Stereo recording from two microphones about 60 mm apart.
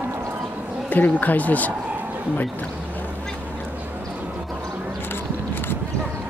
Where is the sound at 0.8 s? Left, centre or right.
Left.